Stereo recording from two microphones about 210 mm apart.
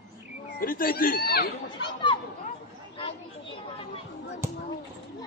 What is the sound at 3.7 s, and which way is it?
Speech, 30° left (ahead or behind).